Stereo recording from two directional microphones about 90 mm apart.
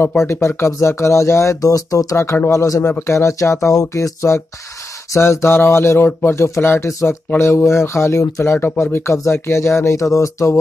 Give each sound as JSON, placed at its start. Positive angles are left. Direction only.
{"t": 0.2, "sound": "speech", "side_deg": 30}
{"t": 2.1, "sound": "speech", "side_deg": 25}